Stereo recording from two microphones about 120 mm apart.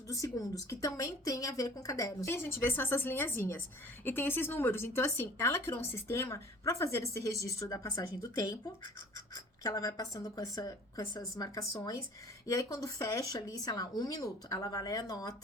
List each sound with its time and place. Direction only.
0.1 s speech: 30° left (ahead or behind)